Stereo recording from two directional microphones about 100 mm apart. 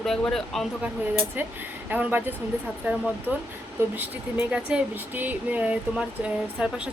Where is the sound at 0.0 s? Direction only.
5° left (ahead or behind).